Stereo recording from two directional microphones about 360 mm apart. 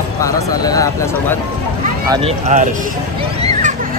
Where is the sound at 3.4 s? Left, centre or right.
Centre.